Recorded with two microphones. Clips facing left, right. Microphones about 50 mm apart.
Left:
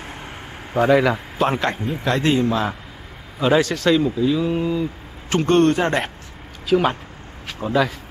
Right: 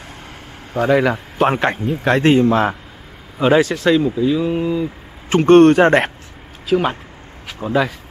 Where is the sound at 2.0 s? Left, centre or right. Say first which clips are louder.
Right 6 dB; right.